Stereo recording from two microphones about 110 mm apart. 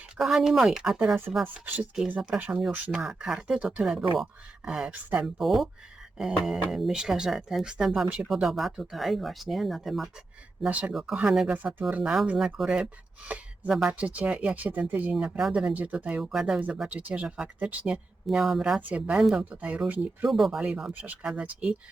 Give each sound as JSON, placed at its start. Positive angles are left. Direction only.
{"t": 0.2, "sound": "speech", "side_deg": 0}
{"t": 1.6, "sound": "speech", "side_deg": -15}
{"t": 6.7, "sound": "speech", "side_deg": -5}
{"t": 10.7, "sound": "speech", "side_deg": -15}
{"t": 18.3, "sound": "speech", "side_deg": 0}
{"t": 20.2, "sound": "speech", "side_deg": 0}